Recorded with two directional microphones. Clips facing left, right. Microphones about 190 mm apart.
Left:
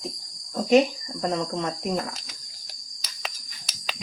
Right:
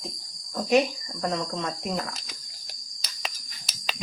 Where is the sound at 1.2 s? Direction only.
20° left (ahead or behind).